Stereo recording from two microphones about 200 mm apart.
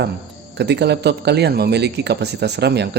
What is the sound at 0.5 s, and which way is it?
Speech, 55° right (ahead or behind).